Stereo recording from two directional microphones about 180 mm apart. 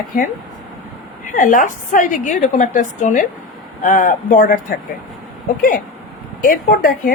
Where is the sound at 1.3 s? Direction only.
45° left (ahead or behind).